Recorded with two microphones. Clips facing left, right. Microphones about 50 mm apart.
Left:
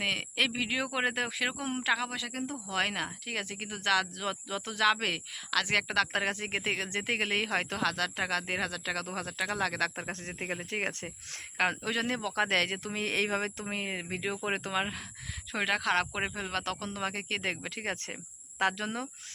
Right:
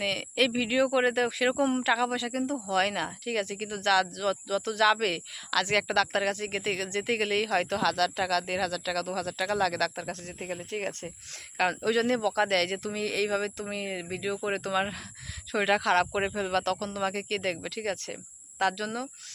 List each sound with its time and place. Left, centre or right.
0.0 s a woman's voice: centre
9.9 s speech: left
10.2 s speech: left
11.5 s a woman's voice: centre
12.9 s speech: left
14.7 s a woman's voice: centre
15.5 s a woman's voice: centre; by 19.0 s left